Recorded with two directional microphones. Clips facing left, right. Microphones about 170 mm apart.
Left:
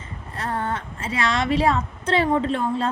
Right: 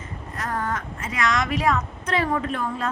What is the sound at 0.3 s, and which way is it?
A woman's voice, 30° left (ahead or behind).